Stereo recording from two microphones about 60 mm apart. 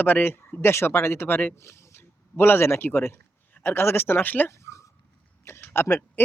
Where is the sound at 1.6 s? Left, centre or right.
Left.